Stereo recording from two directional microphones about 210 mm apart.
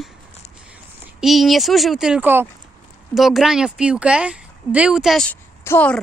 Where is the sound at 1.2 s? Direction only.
Centre (ahead or behind).